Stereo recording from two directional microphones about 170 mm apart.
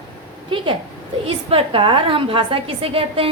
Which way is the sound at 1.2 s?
35° right (ahead or behind).